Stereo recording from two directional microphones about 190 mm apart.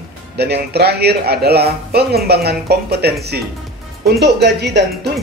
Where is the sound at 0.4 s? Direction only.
60° right (ahead or behind).